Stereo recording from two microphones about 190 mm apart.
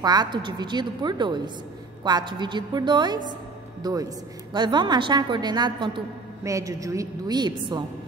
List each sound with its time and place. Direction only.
0.0 s a woman's voice: 20° right (ahead or behind)